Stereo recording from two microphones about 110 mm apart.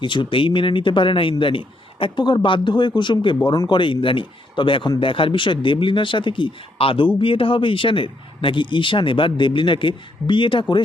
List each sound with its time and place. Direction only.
0.0 s speech: 45° left (ahead or behind)